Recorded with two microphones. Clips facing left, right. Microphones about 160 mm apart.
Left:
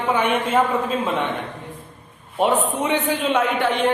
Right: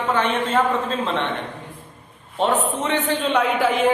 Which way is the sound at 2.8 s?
10° left (ahead or behind).